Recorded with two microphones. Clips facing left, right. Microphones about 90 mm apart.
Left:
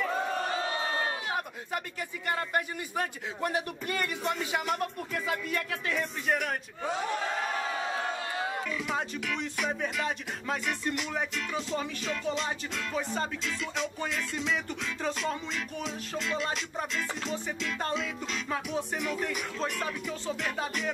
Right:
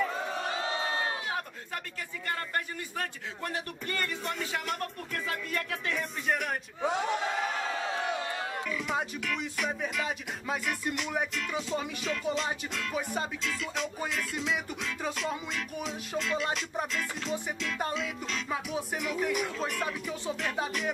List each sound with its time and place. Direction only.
2.2 s speech: 15° left (ahead or behind)
4.6 s music: 5° left (ahead or behind)
6.8 s music: 15° right (ahead or behind)
8.6 s music: centre (ahead or behind)
13.4 s music: centre (ahead or behind)